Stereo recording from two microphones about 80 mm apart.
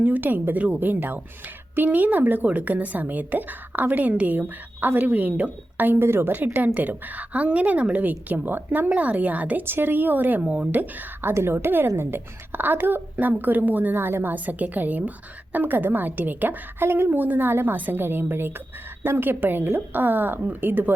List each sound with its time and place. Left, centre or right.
0.0 s a woman's voice: right